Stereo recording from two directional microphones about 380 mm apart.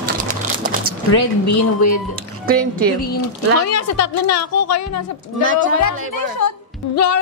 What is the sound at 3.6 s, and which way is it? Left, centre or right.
Speech, left.